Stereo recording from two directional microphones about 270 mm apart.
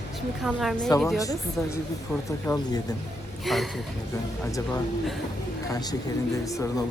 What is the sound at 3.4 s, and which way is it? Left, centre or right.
Speech, centre.